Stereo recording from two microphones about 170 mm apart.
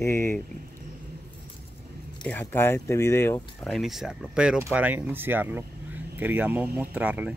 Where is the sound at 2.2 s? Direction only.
10° left (ahead or behind).